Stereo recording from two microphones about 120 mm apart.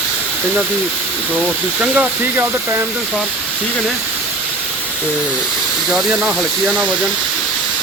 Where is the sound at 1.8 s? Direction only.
10° right (ahead or behind).